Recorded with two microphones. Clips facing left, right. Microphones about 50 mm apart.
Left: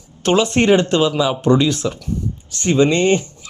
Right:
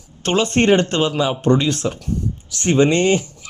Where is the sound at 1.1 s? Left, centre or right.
Right.